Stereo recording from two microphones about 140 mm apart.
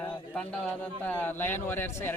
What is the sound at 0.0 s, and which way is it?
A man's voice, 10° left (ahead or behind).